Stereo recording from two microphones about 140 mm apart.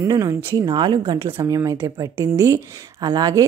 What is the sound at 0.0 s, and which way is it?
Speech, 20° right (ahead or behind).